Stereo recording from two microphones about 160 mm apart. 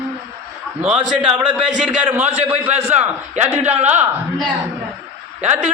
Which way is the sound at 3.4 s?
45° right (ahead or behind).